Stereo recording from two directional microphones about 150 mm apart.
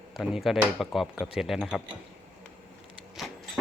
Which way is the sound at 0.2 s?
Centre (ahead or behind).